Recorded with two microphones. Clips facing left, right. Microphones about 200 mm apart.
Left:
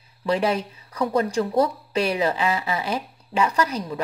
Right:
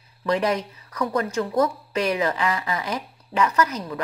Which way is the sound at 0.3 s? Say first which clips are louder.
Even; 25° left (ahead or behind).